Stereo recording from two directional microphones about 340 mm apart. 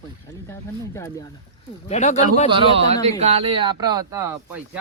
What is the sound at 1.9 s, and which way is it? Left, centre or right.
Speech, centre.